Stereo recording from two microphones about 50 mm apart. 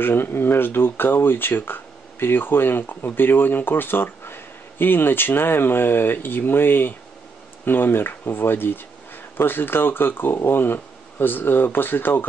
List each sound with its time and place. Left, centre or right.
0.0 s speech: left